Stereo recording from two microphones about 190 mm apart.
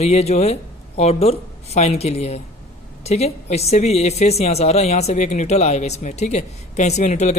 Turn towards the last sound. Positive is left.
turn(degrees=35)  # may be behind; listen again after turning